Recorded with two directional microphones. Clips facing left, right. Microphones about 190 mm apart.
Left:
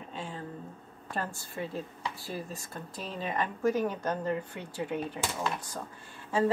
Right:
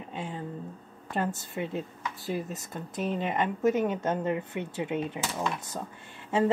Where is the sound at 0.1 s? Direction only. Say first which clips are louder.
Right 3 dB; 20° right (ahead or behind).